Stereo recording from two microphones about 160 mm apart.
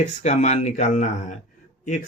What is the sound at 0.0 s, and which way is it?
Speech, 45° left (ahead or behind).